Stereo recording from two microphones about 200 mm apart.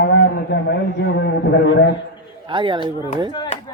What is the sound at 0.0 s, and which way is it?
A man's voice, 60° left (ahead or behind).